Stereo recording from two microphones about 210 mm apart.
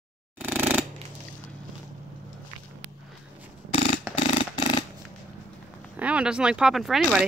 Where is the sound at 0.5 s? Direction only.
10° right (ahead or behind).